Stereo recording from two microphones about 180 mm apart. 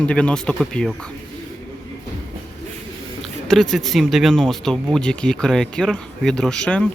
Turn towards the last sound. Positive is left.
turn(degrees=5)  # may be behind; listen again after turning